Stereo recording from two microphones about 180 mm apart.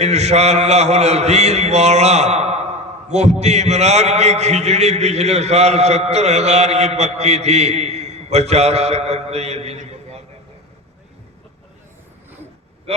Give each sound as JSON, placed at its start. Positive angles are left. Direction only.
{"t": 0.0, "sound": "a man's voice", "side_deg": -40}
{"t": 12.9, "sound": "a man's voice", "side_deg": -35}